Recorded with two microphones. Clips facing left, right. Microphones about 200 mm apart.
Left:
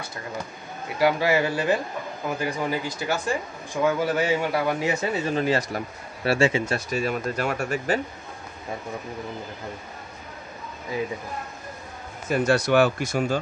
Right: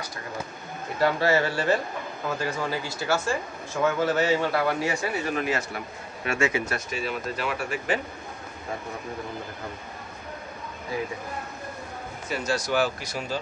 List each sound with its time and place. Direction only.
0.9 s a man's voice: 10° left (ahead or behind)
6.9 s speech: 45° left (ahead or behind)
12.3 s speech: 55° left (ahead or behind)